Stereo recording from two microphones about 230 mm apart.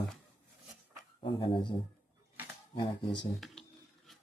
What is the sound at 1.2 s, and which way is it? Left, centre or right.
Speech, left.